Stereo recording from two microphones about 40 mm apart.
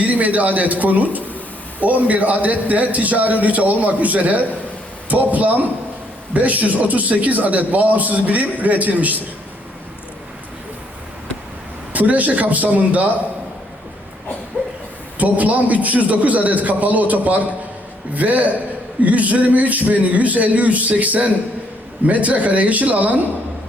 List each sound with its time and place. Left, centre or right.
0.0 s a man's voice: right
11.9 s a man's voice: right
15.2 s a man's voice: right